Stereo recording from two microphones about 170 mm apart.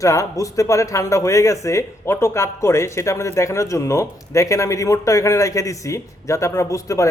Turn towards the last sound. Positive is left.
turn(degrees=20)  # may be behind; listen again after turning